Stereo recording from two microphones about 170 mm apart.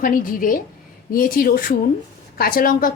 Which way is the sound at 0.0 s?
55° left (ahead or behind).